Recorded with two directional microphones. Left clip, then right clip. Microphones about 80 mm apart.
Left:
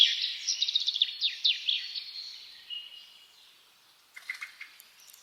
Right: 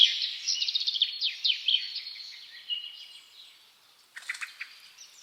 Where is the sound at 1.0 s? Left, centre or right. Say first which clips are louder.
Even; centre.